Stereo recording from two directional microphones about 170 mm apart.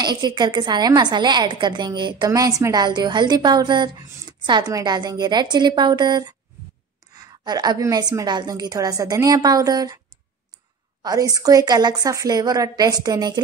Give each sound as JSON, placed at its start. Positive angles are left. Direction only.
{"t": 0.0, "sound": "a woman's voice", "side_deg": -25}
{"t": 11.0, "sound": "a woman's voice", "side_deg": -20}